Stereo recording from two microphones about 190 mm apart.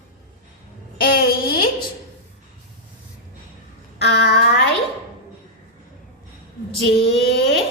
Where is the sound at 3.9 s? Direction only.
60° left (ahead or behind).